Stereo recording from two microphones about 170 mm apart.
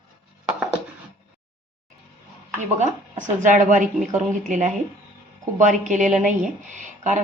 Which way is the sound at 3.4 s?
50° right (ahead or behind).